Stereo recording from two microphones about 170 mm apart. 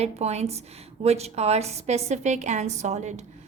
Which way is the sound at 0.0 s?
40° right (ahead or behind).